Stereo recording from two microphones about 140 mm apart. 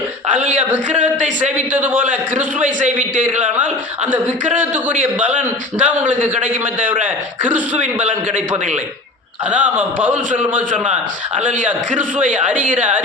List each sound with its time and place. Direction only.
0.3 s a sound: 60° right (ahead or behind)
0.9 s speech: 60° right (ahead or behind)
1.7 s a man's voice: 10° right (ahead or behind)
5.2 s a man's voice: 10° right (ahead or behind)
7.0 s a man's voice: 10° right (ahead or behind)
9.5 s a man's voice: 10° right (ahead or behind)
11.3 s speech: 60° right (ahead or behind)